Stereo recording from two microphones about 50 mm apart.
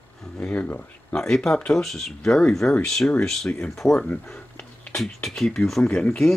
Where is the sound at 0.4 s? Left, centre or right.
Left.